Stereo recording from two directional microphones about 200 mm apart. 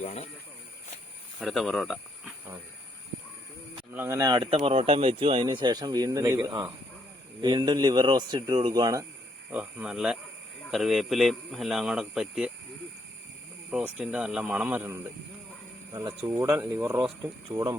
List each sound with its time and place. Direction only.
0.0 s speech: 30° left (ahead or behind)
1.4 s speech: centre (ahead or behind)
3.9 s speech: 15° right (ahead or behind)
9.5 s a man's voice: 5° right (ahead or behind)
13.7 s a man's voice: 5° right (ahead or behind); by 17.7 s 20° right (ahead or behind)